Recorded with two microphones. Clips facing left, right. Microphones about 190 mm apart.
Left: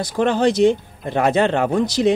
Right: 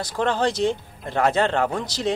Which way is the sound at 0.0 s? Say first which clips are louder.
Left 5 dB; 15° left (ahead or behind).